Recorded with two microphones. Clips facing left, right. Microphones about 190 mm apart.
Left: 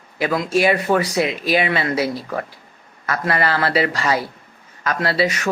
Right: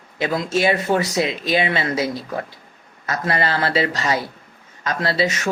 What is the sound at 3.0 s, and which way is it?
Speech, 25° right (ahead or behind).